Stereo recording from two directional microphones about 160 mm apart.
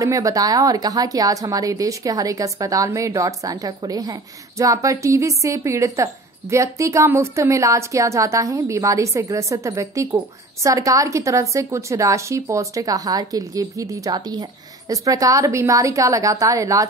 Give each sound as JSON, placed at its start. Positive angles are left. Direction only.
{"t": 0.0, "sound": "a woman's voice", "side_deg": -20}